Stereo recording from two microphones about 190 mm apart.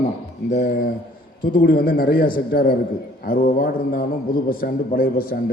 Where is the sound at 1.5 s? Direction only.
50° left (ahead or behind).